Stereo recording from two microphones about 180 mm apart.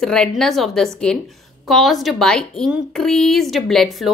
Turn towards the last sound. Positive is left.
turn(degrees=0)  # may be behind; listen again after turning